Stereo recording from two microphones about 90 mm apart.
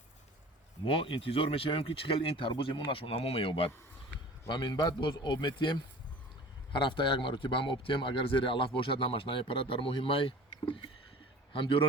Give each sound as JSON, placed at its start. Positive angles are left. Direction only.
{"t": 0.9, "sound": "speech", "side_deg": 80}
{"t": 4.4, "sound": "a man's voice", "side_deg": 55}